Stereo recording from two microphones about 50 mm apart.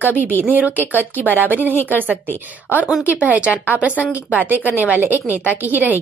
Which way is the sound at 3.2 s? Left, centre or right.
Right.